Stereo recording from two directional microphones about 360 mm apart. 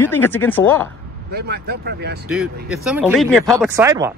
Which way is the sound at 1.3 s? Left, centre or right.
Right.